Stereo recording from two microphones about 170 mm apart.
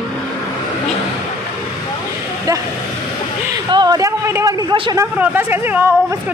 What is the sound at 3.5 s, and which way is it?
A woman's voice, 25° right (ahead or behind).